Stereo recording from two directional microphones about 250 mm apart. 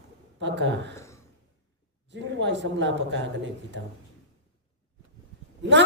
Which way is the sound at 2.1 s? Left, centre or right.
Right.